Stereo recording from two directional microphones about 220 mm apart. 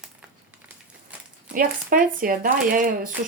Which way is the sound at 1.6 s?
40° right (ahead or behind).